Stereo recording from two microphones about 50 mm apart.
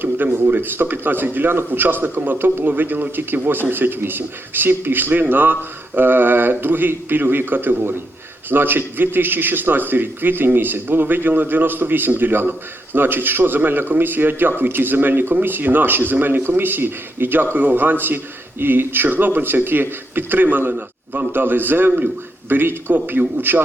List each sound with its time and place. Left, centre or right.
0.0 s a man's voice: right